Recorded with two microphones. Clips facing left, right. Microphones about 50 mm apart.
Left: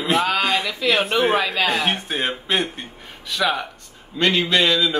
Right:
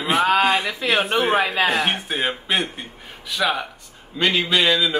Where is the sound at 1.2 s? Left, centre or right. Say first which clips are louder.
Even; centre.